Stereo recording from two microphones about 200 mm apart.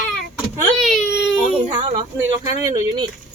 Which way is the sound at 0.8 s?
Centre (ahead or behind).